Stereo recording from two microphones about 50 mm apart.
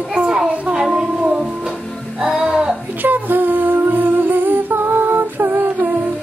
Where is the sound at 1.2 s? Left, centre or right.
Centre.